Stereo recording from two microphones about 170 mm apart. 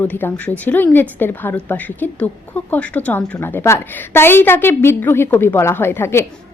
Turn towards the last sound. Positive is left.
turn(degrees=15)  # may be behind; listen again after turning